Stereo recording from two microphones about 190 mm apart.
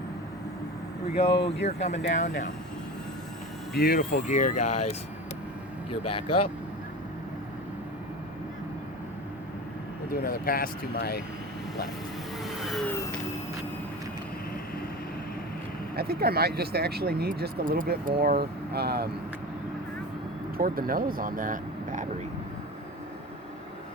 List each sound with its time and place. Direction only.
1.2 s speech: 30° left (ahead or behind)
2.0 s speech: 75° left (ahead or behind)
2.2 s speech: 40° left (ahead or behind)
3.8 s speech: 50° left (ahead or behind); by 4.9 s 35° left (ahead or behind)
10.1 s speech: 50° left (ahead or behind)
16.0 s speech: 55° right (ahead or behind)
20.6 s speech: 50° right (ahead or behind)